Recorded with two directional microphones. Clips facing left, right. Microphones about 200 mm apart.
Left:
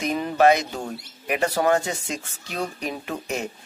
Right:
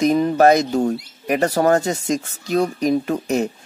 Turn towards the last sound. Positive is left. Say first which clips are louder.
# right 9 dB
turn(degrees=-40)  # may be behind; listen again after turning